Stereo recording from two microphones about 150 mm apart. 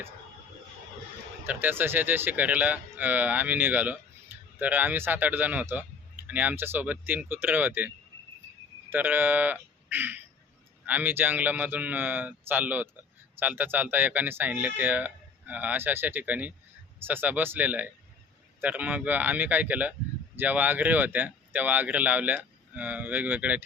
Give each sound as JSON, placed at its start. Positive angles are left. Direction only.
{"t": 1.5, "sound": "speech", "side_deg": -15}
{"t": 4.3, "sound": "a sound", "side_deg": -15}
{"t": 4.6, "sound": "speech", "side_deg": -10}